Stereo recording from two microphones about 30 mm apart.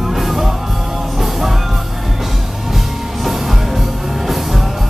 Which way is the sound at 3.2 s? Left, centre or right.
Centre.